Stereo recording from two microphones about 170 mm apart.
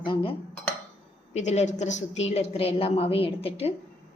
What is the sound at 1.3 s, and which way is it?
A woman's voice, 40° left (ahead or behind).